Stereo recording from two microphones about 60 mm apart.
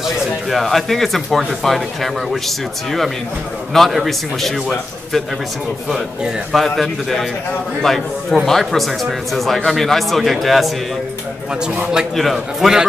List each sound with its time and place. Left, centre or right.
0.0 s speech: centre
6.5 s speech: centre
11.6 s speech: right
12.2 s speech: centre